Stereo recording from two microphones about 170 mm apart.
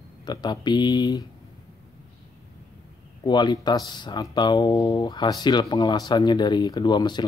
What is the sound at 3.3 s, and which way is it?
Speech, 25° left (ahead or behind).